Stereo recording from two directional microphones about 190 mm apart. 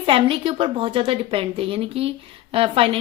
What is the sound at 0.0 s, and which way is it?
A woman's voice, 30° right (ahead or behind).